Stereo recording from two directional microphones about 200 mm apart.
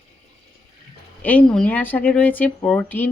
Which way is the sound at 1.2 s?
5° left (ahead or behind).